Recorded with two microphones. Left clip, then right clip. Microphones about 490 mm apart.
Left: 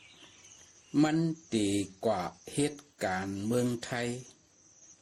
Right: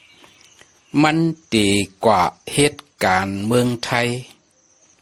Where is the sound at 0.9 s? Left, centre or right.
Centre.